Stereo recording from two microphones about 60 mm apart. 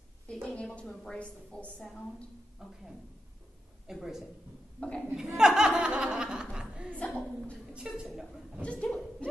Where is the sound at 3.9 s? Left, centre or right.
Centre.